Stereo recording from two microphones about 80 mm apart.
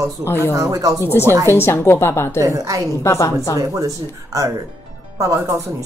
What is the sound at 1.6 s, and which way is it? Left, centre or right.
Speech, left.